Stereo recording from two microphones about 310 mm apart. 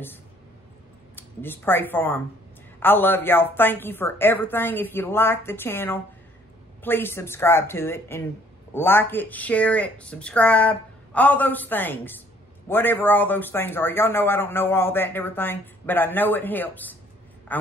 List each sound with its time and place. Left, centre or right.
1.1 s a woman's voice: centre